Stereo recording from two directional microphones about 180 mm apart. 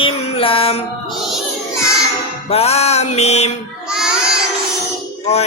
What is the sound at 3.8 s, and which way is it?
Baby cry, 5° right (ahead or behind).